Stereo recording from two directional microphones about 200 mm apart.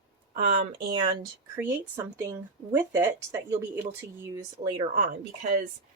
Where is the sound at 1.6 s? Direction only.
15° right (ahead or behind).